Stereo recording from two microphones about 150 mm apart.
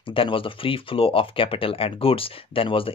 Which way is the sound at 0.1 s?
35° left (ahead or behind).